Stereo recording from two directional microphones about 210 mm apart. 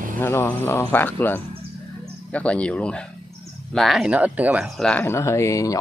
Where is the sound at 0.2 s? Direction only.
10° left (ahead or behind).